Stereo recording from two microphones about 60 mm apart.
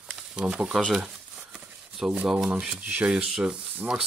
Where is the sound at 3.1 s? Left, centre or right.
Centre.